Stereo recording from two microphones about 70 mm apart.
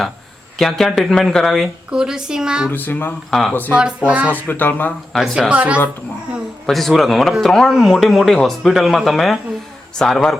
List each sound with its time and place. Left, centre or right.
0.6 s speech: centre
1.9 s a woman's voice: centre
2.6 s speech: left
3.8 s a woman's voice: centre
4.4 s speech: left
5.2 s a woman's voice: centre
5.5 s speech: centre
6.7 s speech: centre
10.0 s speech: centre